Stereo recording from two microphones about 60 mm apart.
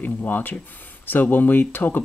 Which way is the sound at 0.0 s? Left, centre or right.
Left.